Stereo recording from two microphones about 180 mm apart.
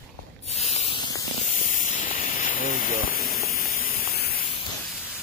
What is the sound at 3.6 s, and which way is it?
Spray, 50° left (ahead or behind).